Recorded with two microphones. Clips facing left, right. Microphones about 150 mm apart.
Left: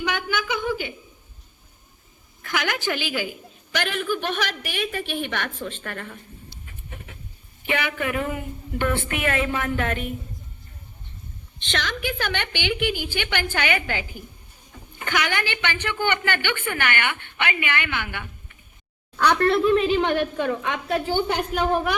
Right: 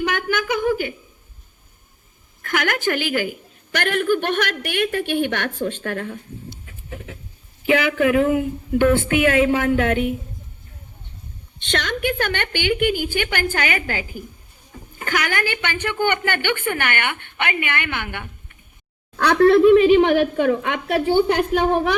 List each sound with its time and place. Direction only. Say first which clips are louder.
0.0 s a woman's voice: right 4 dB; 50° right (ahead or behind)
2.4 s a woman's voice: right 4 dB; 50° right (ahead or behind); by 6.1 s 70° right (ahead or behind)
6.9 s a sound: right 8 dB; 80° right
7.7 s a woman's voice: right 9 dB; 90° right
11.6 s a woman's voice: right 5 dB; 60° right (ahead or behind)
19.4 s a woman's voice: right 10 dB; 80° right